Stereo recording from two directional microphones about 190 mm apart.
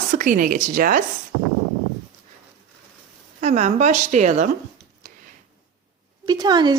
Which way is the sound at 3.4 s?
35° right (ahead or behind).